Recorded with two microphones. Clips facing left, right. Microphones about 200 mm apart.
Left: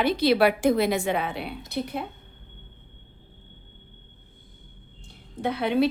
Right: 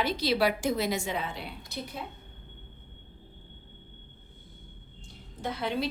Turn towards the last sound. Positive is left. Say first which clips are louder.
# left 8 dB
turn(degrees=60)  # may be behind; listen again after turning